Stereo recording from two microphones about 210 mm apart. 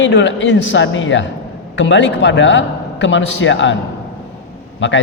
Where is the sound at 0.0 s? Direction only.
60° left (ahead or behind).